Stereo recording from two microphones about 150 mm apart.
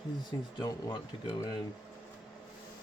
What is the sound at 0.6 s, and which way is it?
Speech, 25° left (ahead or behind).